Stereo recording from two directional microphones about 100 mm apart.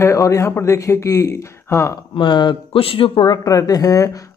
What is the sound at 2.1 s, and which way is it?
Speech, 55° left (ahead or behind).